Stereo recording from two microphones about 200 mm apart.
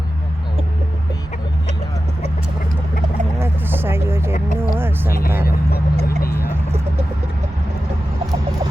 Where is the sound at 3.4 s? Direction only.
10° right (ahead or behind).